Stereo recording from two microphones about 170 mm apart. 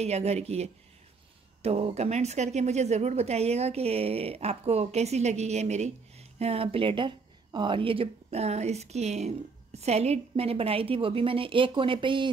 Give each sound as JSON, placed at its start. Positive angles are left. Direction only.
{"t": 0.0, "sound": "speech", "side_deg": -40}